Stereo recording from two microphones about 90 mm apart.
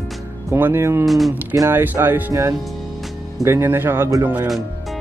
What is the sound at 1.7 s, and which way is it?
Speech, 25° right (ahead or behind).